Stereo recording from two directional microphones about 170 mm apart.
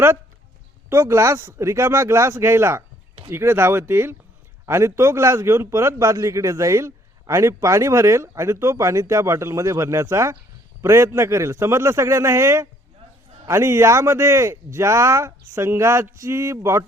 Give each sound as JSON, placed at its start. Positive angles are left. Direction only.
{"t": 0.9, "sound": "a man's voice", "side_deg": -15}